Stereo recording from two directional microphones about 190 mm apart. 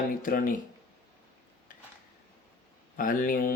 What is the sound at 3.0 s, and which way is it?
Speech, 45° left (ahead or behind).